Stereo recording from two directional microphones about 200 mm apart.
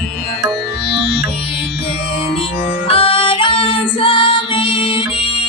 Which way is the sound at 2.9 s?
30° left (ahead or behind).